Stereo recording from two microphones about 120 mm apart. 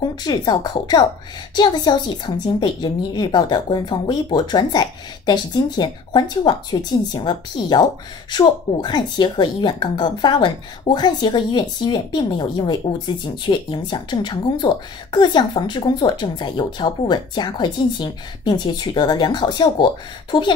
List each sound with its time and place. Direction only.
0.0 s a woman's voice: 35° left (ahead or behind)